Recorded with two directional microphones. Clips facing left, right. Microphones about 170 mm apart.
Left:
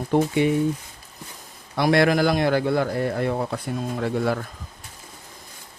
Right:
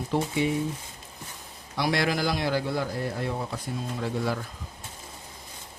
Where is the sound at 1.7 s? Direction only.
55° left (ahead or behind).